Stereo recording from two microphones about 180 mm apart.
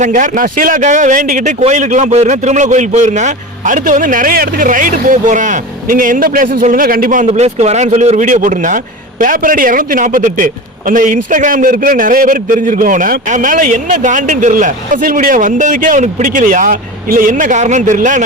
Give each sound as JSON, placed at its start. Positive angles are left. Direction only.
{"t": 0.0, "sound": "a man's voice", "side_deg": -45}
{"t": 7.3, "sound": "a man's voice", "side_deg": -35}